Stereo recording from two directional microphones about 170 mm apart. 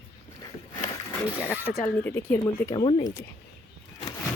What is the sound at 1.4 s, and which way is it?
Speech, 15° left (ahead or behind).